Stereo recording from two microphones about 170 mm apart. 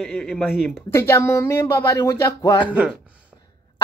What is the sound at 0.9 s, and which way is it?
Speech, 15° left (ahead or behind).